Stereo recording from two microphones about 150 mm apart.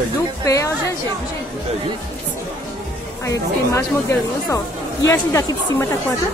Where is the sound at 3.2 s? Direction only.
20° left (ahead or behind).